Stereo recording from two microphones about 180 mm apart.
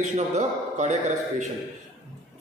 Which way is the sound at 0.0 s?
40° right (ahead or behind).